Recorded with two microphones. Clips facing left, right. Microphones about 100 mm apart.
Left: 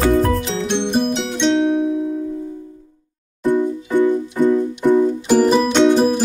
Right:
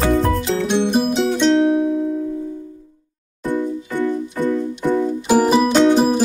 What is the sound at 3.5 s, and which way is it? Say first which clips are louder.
Music: left 4 dB; 15° left (ahead or behind).